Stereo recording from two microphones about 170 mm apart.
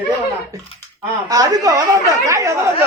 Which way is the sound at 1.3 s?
20° right (ahead or behind).